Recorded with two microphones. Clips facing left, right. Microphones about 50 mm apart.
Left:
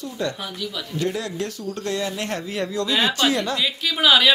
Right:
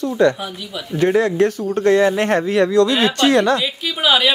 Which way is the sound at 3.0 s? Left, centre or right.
Right.